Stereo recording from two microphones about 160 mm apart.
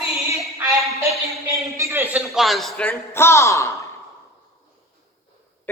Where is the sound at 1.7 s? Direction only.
15° right (ahead or behind); by 3.8 s 20° left (ahead or behind).